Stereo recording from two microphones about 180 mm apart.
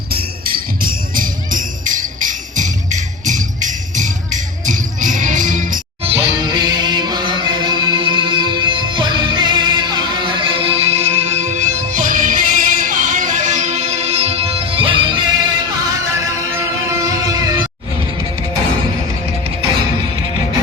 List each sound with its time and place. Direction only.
0.1 s jingle bell: 55° right (ahead or behind)
6.1 s music: 25° right (ahead or behind)
16.9 s music: 20° right (ahead or behind)